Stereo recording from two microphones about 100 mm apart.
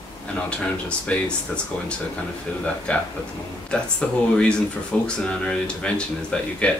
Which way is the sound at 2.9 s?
10° left (ahead or behind).